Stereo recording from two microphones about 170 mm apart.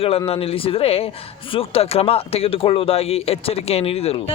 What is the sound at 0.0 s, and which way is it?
Speech, 35° left (ahead or behind).